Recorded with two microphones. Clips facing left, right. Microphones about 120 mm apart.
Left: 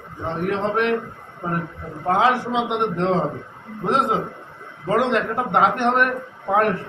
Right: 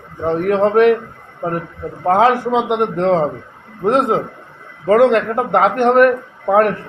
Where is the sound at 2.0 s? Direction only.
50° right (ahead or behind).